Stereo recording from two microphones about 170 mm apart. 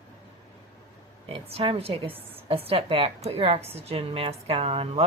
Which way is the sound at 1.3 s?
35° right (ahead or behind).